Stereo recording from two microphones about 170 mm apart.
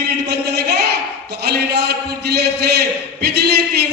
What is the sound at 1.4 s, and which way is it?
Speech, 70° right (ahead or behind).